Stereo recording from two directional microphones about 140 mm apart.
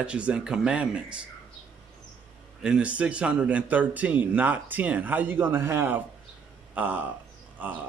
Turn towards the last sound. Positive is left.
turn(degrees=-10)  # may be behind; listen again after turning